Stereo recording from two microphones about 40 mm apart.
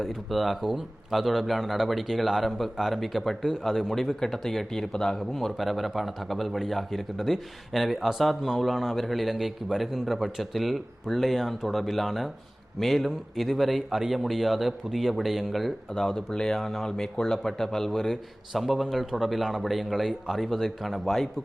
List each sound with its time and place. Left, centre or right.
0.0 s a man's voice: centre
5.1 s a man's voice: centre
16.1 s speech: centre
16.6 s a man's voice: centre